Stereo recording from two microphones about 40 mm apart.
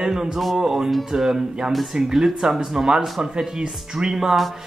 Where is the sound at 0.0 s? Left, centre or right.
Centre.